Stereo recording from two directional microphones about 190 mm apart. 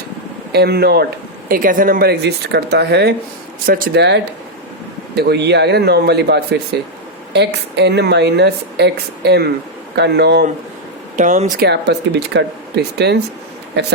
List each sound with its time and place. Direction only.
0.5 s a woman's voice: 55° right (ahead or behind)
11.2 s speech: 40° right (ahead or behind)
11.6 s a woman's voice: 60° right (ahead or behind)